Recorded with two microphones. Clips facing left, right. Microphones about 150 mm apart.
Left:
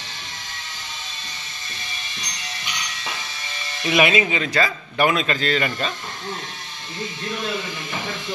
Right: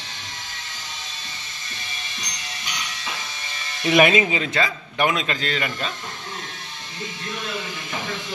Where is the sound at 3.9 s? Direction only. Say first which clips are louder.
Right 2 dB; 45° right (ahead or behind).